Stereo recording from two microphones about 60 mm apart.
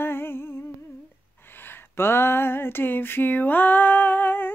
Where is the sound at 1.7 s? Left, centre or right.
Left.